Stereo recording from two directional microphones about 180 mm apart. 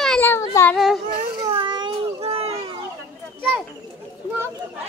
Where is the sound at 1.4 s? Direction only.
25° right (ahead or behind).